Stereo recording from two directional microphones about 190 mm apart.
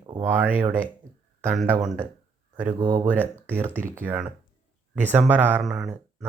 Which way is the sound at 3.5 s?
10° right (ahead or behind).